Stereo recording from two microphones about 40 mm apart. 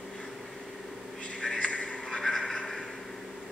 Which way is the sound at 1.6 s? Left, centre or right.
Left.